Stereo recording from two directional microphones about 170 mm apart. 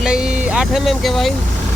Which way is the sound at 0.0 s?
5° right (ahead or behind).